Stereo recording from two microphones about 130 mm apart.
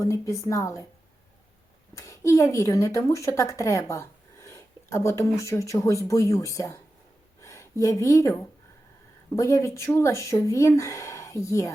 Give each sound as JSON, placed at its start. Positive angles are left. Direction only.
{"t": 0.0, "sound": "speech", "side_deg": 25}
{"t": 2.0, "sound": "a woman's voice", "side_deg": 25}